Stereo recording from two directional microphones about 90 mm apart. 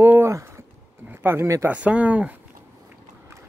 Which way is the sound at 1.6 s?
15° right (ahead or behind).